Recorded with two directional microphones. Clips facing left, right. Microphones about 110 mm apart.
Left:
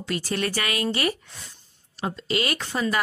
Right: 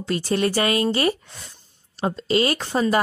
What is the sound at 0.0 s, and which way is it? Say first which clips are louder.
A woman's voice: right 5 dB; 30° right (ahead or behind).